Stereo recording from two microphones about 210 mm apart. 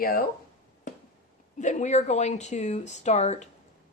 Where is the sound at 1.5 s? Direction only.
35° left (ahead or behind).